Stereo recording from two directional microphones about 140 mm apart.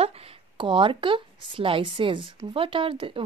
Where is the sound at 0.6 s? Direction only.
35° right (ahead or behind).